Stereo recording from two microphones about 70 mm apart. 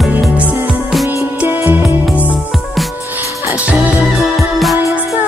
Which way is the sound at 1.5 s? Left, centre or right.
Right.